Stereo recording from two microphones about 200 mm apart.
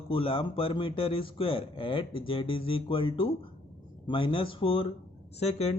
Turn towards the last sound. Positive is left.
turn(degrees=30)  # may be behind; listen again after turning